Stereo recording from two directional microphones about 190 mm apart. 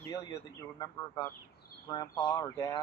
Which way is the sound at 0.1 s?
20° left (ahead or behind).